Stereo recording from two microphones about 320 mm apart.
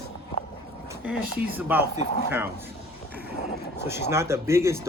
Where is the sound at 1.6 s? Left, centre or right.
Centre.